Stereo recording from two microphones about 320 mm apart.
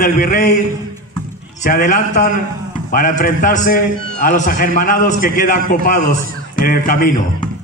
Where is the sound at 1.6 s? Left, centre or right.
Left.